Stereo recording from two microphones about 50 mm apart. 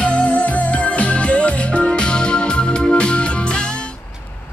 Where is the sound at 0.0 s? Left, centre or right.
Left.